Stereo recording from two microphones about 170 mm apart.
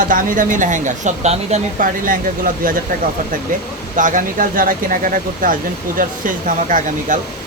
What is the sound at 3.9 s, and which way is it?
Speech, 50° right (ahead or behind).